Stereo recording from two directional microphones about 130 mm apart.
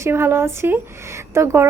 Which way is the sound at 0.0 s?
20° right (ahead or behind).